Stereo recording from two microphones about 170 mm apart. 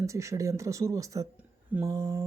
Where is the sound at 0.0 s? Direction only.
20° right (ahead or behind).